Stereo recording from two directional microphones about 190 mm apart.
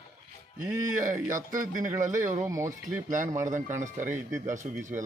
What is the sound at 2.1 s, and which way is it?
Speech, 40° right (ahead or behind).